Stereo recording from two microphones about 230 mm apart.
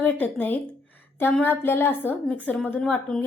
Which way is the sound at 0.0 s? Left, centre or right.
Centre.